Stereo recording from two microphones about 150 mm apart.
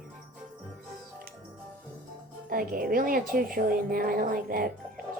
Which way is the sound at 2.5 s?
70° right (ahead or behind).